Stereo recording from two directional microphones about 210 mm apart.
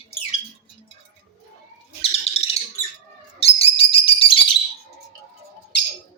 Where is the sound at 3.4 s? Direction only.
25° left (ahead or behind).